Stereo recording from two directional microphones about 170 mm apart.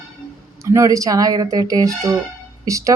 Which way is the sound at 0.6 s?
20° right (ahead or behind).